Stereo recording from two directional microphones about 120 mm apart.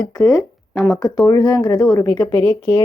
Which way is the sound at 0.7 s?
Centre (ahead or behind).